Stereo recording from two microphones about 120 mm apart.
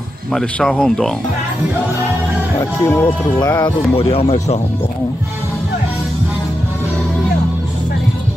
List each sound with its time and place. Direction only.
0.3 s speech: 5° left (ahead or behind)
2.6 s speech: 25° left (ahead or behind)
3.9 s speech: 50° left (ahead or behind)